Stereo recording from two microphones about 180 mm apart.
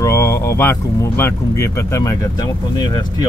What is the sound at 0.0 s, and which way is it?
Speech, 15° left (ahead or behind).